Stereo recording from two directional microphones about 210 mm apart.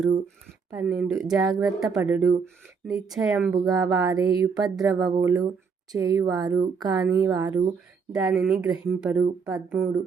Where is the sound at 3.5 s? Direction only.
15° right (ahead or behind).